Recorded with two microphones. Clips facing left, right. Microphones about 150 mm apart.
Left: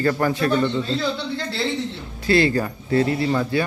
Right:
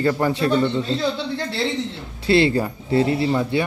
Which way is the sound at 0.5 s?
15° right (ahead or behind).